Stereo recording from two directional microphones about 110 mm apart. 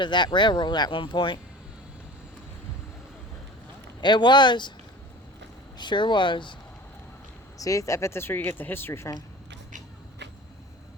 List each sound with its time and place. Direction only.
0.0 s speech: 45° left (ahead or behind)
4.0 s speech: 45° left (ahead or behind)
5.7 s speech: 45° left (ahead or behind)
7.6 s speech: 30° left (ahead or behind)